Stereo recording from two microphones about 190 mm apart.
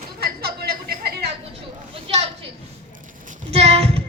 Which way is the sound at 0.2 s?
55° right (ahead or behind).